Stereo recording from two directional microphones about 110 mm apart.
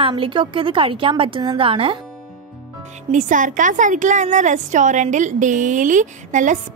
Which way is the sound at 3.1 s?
75° right (ahead or behind).